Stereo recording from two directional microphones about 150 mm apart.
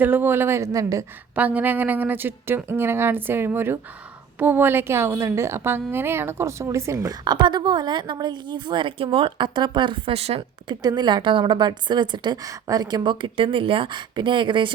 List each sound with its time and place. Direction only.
0.0 s speech: 10° right (ahead or behind)
1.4 s a woman's voice: 10° right (ahead or behind); by 10.8 s 40° right (ahead or behind)
10.8 s a woman's voice: 30° right (ahead or behind)